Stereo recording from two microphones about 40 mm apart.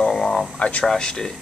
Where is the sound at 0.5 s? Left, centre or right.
Left.